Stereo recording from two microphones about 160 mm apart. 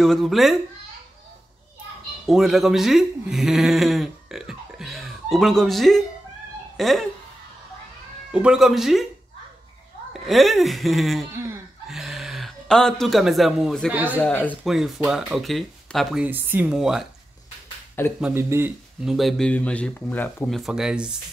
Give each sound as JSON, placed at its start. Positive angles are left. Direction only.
{"t": 0.0, "sound": "speech", "side_deg": 0}
{"t": 2.2, "sound": "speech", "side_deg": 0}
{"t": 8.3, "sound": "speech", "side_deg": -5}
{"t": 10.2, "sound": "speech", "side_deg": 0}
{"t": 11.3, "sound": "speech", "side_deg": -15}
{"t": 11.9, "sound": "speech", "side_deg": 0}
{"t": 14.2, "sound": "speech", "side_deg": 10}
{"t": 14.6, "sound": "speech", "side_deg": 0}
{"t": 18.2, "sound": "speech", "side_deg": -15}
{"t": 19.0, "sound": "speech", "side_deg": 0}
{"t": 20.4, "sound": "speech", "side_deg": 0}